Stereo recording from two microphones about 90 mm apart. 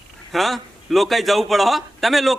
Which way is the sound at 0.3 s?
Centre (ahead or behind).